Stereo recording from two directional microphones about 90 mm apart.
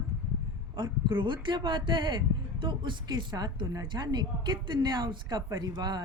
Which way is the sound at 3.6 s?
35° right (ahead or behind).